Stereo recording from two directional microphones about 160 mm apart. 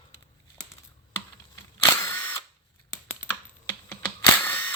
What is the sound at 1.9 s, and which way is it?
Drill, 15° left (ahead or behind).